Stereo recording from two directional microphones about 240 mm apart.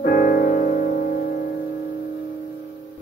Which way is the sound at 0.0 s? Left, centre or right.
Left.